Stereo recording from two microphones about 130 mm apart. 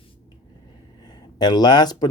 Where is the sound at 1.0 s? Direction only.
35° left (ahead or behind).